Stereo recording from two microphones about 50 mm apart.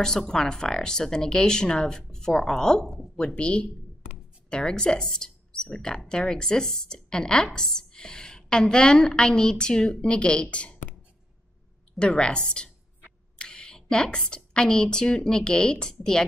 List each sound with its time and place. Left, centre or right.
0.0 s a woman's voice: centre
12.0 s a woman's voice: centre